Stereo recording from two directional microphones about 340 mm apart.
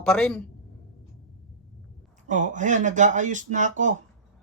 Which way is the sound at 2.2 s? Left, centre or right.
Right.